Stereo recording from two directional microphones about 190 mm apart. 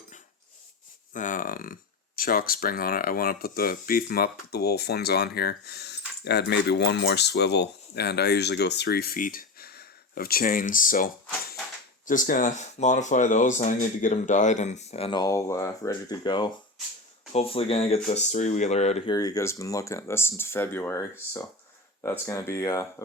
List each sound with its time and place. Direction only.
1.1 s speech: 40° left (ahead or behind)
19.1 s speech: 20° left (ahead or behind)